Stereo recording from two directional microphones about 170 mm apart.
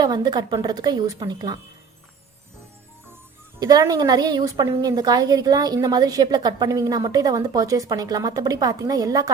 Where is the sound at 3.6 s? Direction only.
20° right (ahead or behind).